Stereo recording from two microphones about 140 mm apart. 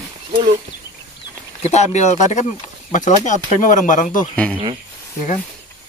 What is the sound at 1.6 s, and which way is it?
Speech, 55° left (ahead or behind).